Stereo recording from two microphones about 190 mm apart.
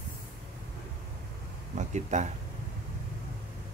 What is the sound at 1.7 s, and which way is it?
Speech, 40° right (ahead or behind).